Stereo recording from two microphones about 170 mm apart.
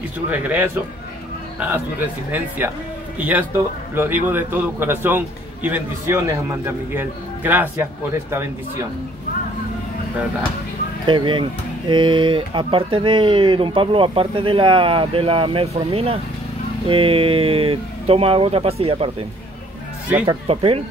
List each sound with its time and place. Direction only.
0.3 s a man's voice: 10° right (ahead or behind)
11.1 s speech: 30° right (ahead or behind)
20.2 s speech: 35° right (ahead or behind)